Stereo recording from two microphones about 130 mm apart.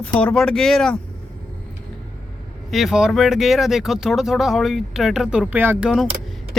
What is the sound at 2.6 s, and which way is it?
Speech, centre (ahead or behind).